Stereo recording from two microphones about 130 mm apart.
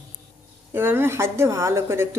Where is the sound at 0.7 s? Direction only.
15° right (ahead or behind).